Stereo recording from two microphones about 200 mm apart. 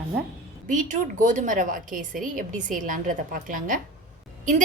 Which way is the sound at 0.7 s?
40° right (ahead or behind).